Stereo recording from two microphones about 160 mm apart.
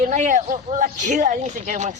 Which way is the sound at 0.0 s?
50° right (ahead or behind).